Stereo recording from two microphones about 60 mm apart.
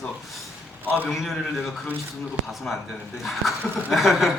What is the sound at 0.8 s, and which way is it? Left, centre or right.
Speech, right.